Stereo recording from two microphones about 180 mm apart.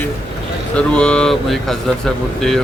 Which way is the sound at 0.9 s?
5° left (ahead or behind).